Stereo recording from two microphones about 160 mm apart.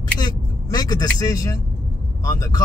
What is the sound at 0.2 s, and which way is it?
Vehicle, 25° left (ahead or behind).